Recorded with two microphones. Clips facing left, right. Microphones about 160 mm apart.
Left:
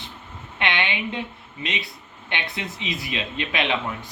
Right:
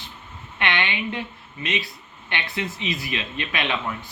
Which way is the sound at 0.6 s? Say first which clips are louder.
Even; 15° left (ahead or behind).